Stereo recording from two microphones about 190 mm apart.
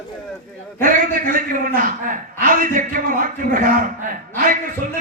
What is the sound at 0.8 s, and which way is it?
A man's voice, 45° right (ahead or behind).